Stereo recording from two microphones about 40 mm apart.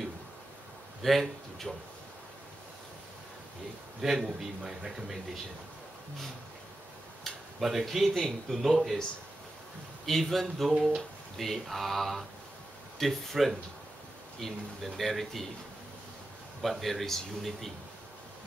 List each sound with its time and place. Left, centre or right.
1.0 s speech: centre
4.0 s a man's voice: centre
7.3 s a sound: centre
7.8 s speech: centre
10.0 s speech: centre
16.6 s speech: centre